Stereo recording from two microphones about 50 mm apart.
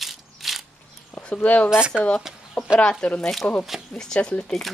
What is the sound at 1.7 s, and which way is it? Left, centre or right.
Speech, centre.